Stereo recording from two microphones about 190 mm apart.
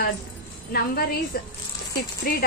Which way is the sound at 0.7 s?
55° left (ahead or behind).